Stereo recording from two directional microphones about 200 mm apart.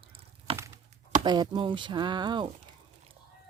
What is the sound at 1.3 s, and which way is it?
Speech, 20° right (ahead or behind).